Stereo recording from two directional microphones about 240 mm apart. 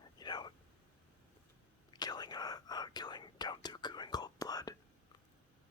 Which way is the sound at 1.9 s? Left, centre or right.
Centre.